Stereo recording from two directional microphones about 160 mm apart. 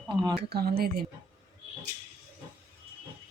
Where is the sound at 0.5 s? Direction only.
70° right (ahead or behind).